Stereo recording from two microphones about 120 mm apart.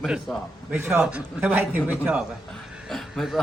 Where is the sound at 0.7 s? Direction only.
15° right (ahead or behind).